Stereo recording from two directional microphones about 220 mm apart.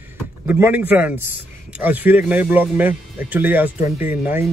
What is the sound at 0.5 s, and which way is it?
A man's voice, 10° right (ahead or behind).